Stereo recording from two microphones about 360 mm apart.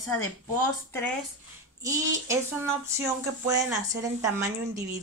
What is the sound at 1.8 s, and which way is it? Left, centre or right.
Speech, centre.